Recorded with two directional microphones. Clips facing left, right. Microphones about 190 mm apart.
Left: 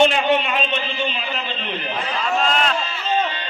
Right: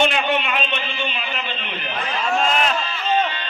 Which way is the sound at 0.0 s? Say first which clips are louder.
Left 3 dB; 35° left (ahead or behind).